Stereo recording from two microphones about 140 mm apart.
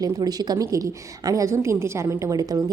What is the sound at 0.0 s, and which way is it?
A woman's voice, 30° right (ahead or behind).